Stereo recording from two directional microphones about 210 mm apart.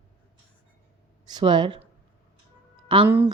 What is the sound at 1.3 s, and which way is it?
Speech, 20° right (ahead or behind).